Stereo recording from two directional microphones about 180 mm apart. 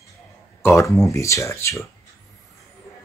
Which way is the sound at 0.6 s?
15° left (ahead or behind).